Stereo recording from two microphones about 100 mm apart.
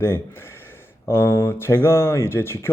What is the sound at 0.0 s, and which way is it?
Speech, 25° left (ahead or behind).